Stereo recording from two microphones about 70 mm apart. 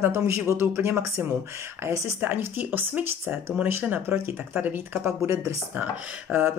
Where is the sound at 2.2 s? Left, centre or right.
Right.